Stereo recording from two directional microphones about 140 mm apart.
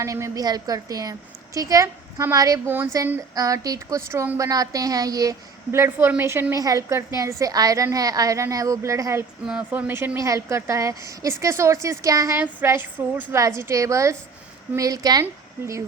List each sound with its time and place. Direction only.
0.0 s a woman's voice: 25° right (ahead or behind)
9.5 s a woman's voice: 10° right (ahead or behind)